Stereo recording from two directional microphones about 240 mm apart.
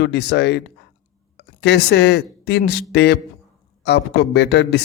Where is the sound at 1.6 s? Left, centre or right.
Left.